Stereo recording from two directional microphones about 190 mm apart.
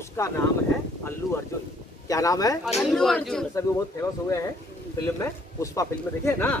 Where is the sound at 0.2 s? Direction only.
15° left (ahead or behind).